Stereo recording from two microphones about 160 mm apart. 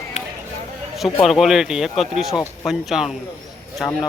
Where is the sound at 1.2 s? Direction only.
Centre (ahead or behind).